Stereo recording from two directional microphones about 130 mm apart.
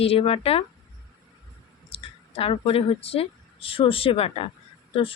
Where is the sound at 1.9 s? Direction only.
45° left (ahead or behind).